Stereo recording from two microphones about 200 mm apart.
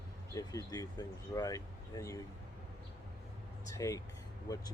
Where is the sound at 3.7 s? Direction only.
15° left (ahead or behind).